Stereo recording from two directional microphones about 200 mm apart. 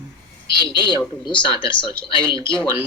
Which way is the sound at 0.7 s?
25° left (ahead or behind).